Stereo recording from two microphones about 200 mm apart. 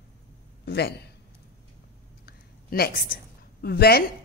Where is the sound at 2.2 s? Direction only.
50° left (ahead or behind).